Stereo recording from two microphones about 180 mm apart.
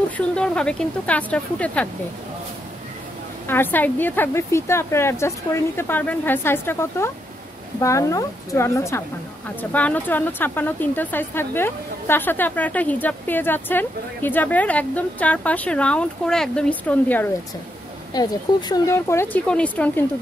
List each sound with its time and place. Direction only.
0.2 s speech: 5° left (ahead or behind)
3.4 s speech: 10° left (ahead or behind)
18.1 s speech: 20° left (ahead or behind)